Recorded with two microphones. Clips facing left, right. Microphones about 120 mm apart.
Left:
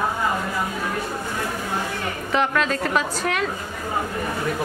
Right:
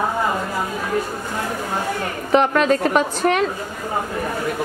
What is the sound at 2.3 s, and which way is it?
A woman's voice, 50° right (ahead or behind).